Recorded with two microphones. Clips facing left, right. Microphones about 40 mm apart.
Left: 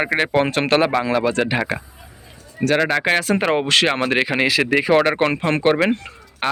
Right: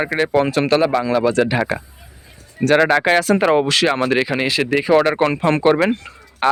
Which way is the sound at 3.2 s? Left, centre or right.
Left.